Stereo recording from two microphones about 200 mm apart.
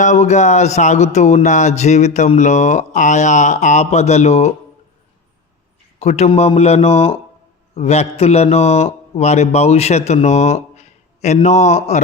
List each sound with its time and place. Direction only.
0.0 s speech: 35° left (ahead or behind)
6.0 s speech: 35° left (ahead or behind)